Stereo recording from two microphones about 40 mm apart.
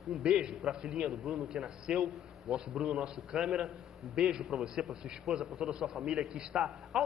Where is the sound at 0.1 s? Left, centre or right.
Right; by 1.5 s centre.